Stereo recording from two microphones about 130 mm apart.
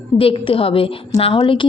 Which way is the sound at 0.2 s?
45° left (ahead or behind).